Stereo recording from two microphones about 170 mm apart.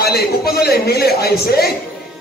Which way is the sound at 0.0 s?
65° left (ahead or behind).